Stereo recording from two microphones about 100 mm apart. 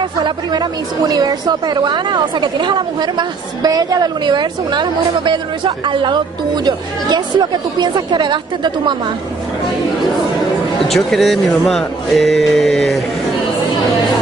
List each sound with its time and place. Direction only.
0.2 s a woman's voice: 45° right (ahead or behind)
10.9 s speech: centre (ahead or behind)